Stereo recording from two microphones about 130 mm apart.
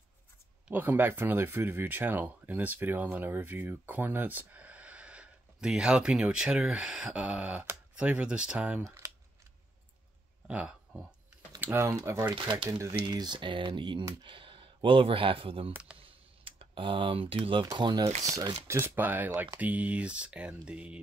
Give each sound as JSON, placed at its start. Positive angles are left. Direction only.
{"t": 0.7, "sound": "speech", "side_deg": -15}
{"t": 8.8, "sound": "speech", "side_deg": -25}
{"t": 10.5, "sound": "speech", "side_deg": -10}
{"t": 11.6, "sound": "speech", "side_deg": -20}
{"t": 12.9, "sound": "speech", "side_deg": -35}
{"t": 15.7, "sound": "speech", "side_deg": -10}
{"t": 16.0, "sound": "computer keyboard", "side_deg": -45}
{"t": 17.7, "sound": "speech", "side_deg": -35}
{"t": 18.7, "sound": "speech", "side_deg": -15}